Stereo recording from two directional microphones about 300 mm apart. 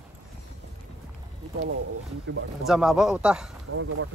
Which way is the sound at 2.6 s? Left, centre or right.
Centre.